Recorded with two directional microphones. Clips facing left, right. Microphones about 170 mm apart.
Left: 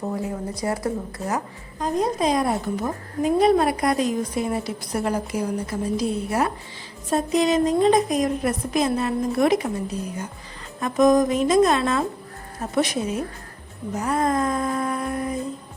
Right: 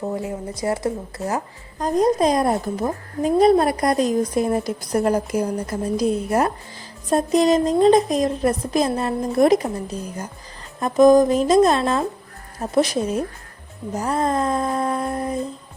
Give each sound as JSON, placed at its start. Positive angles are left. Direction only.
{"t": 0.2, "sound": "speech", "side_deg": -20}
{"t": 1.8, "sound": "a woman's voice", "side_deg": -40}
{"t": 10.8, "sound": "a woman's voice", "side_deg": -35}
{"t": 13.9, "sound": "humming", "side_deg": -30}